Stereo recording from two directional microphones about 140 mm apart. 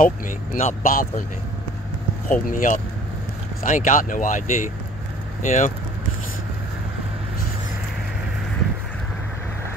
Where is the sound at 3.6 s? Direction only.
65° left (ahead or behind).